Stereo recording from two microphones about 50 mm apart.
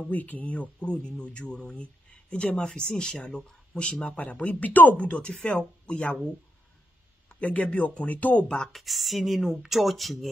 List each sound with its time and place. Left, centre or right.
0.1 s speech: left
5.3 s speech: centre
7.2 s speech: left
8.7 s speech: centre